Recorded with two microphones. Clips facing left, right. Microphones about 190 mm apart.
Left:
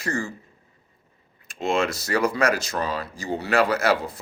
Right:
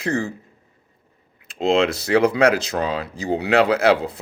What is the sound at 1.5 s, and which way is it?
Speech, 60° right (ahead or behind).